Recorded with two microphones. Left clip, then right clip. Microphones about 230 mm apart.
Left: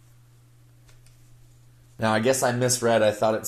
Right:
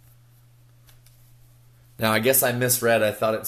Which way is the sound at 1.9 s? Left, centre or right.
Right.